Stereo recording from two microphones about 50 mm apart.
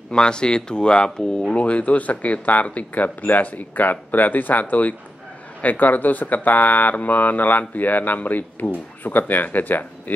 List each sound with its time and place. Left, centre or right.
0.1 s speech: centre
1.6 s speech: left